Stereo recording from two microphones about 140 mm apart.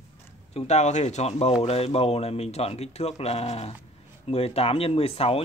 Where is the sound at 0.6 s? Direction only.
55° left (ahead or behind).